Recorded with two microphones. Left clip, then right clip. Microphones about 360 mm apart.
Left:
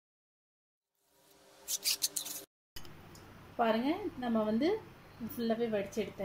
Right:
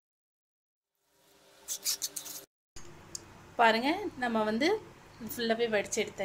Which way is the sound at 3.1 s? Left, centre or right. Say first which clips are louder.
Right 6 dB; right.